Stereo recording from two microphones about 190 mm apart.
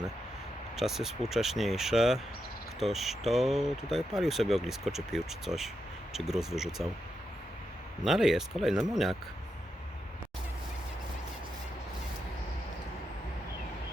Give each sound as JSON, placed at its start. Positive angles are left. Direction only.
{"t": 0.8, "sound": "speech", "side_deg": 0}
{"t": 8.0, "sound": "speech", "side_deg": 0}